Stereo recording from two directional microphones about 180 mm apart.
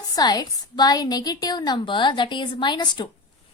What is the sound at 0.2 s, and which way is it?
A woman's voice, 20° left (ahead or behind).